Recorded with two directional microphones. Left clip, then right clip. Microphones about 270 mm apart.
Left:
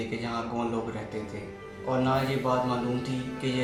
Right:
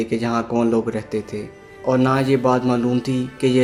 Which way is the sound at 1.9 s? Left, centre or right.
Right.